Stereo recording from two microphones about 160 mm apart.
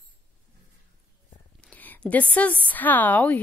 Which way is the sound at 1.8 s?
10° left (ahead or behind).